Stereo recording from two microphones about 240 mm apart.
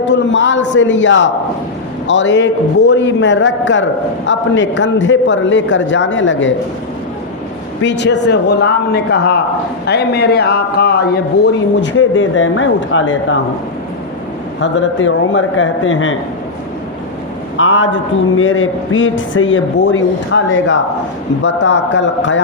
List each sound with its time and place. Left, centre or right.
0.0 s a man's voice: left
7.8 s a man's voice: left
14.6 s a man's voice: left
17.6 s a man's voice: left